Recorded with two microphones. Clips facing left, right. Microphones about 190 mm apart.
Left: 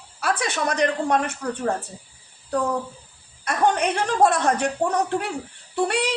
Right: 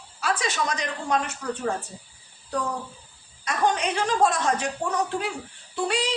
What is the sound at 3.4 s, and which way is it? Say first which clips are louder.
Speech: left 3 dB; 55° left (ahead or behind).